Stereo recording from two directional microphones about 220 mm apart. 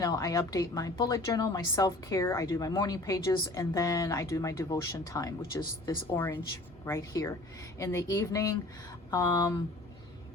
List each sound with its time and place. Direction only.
0.0 s a woman's voice: 15° left (ahead or behind)